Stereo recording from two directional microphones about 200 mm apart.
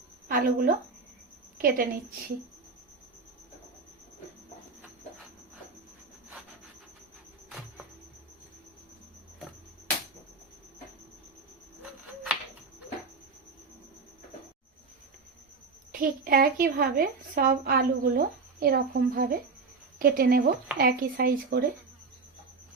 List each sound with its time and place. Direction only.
0.3 s a woman's voice: 45° right (ahead or behind)
11.8 s a sound: 5° right (ahead or behind)
15.9 s a woman's voice: 45° right (ahead or behind)